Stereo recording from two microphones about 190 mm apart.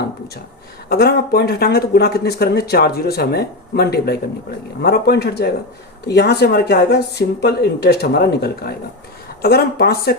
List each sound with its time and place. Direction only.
0.9 s speech: 55° left (ahead or behind)